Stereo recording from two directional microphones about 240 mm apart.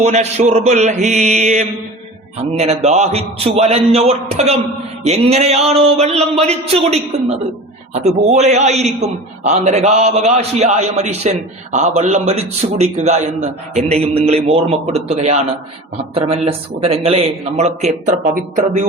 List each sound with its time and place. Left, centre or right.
0.0 s a man's voice: right